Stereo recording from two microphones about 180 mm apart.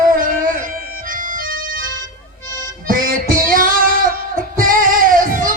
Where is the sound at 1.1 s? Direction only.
50° right (ahead or behind).